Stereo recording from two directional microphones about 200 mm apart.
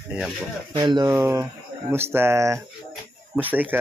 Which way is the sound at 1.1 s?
10° right (ahead or behind).